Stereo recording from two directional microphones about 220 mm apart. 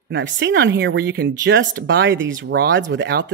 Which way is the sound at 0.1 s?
55° right (ahead or behind).